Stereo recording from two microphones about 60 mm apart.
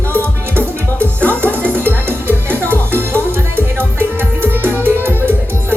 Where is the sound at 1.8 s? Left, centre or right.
Right.